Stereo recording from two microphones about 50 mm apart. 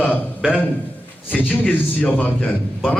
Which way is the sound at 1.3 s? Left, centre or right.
Left.